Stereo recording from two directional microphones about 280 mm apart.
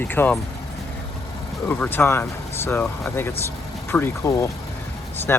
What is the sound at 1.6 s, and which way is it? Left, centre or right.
Speech, centre.